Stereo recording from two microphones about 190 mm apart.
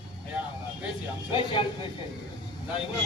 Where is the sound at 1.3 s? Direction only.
25° left (ahead or behind).